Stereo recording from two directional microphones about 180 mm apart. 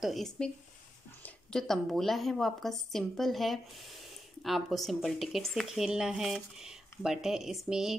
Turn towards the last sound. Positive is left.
turn(degrees=0)  # may be behind; listen again after turning